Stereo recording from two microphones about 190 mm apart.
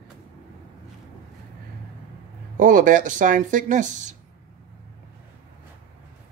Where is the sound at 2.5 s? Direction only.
45° right (ahead or behind).